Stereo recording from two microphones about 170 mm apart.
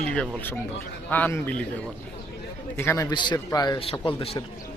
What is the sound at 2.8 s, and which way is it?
A man's voice, 15° left (ahead or behind).